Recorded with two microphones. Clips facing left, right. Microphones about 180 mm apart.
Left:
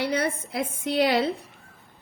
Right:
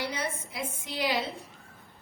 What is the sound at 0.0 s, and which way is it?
A woman's voice, 65° left (ahead or behind).